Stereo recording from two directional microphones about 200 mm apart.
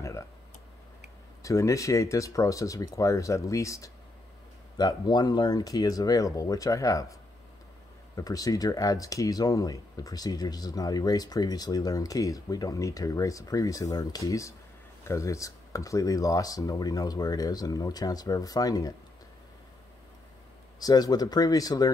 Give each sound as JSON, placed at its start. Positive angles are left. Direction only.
{"t": 1.4, "sound": "speech", "side_deg": 15}
{"t": 8.2, "sound": "speech", "side_deg": 15}
{"t": 20.8, "sound": "speech", "side_deg": 20}